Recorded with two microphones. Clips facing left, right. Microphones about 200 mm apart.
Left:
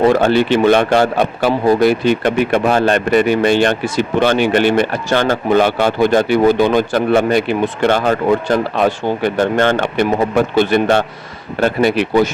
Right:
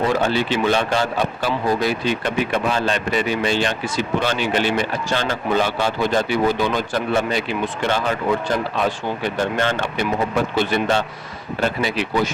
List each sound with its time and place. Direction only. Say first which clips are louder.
0.0 s speech: left 8 dB; 60° left (ahead or behind)